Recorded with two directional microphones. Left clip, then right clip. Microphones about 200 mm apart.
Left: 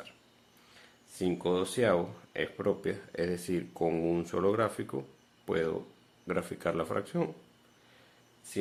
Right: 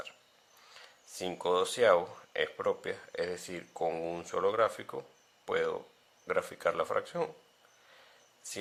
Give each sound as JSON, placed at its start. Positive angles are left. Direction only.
{"t": 0.8, "sound": "speech", "side_deg": -30}